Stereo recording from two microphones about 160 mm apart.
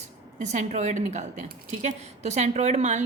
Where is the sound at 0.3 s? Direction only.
50° right (ahead or behind).